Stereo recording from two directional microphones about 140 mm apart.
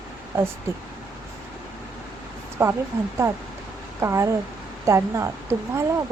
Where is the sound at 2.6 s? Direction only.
15° right (ahead or behind).